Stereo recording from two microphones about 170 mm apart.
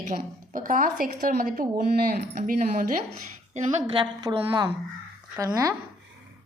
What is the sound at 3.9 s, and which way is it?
A woman's voice, 25° right (ahead or behind).